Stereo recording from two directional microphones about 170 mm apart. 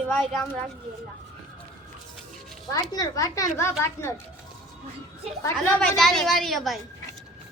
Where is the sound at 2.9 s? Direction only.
20° left (ahead or behind).